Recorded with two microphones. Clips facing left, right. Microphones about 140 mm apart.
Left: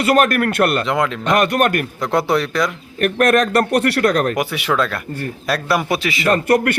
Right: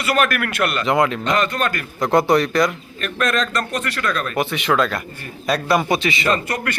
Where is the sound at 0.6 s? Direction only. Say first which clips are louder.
Left 4 dB; 55° left (ahead or behind).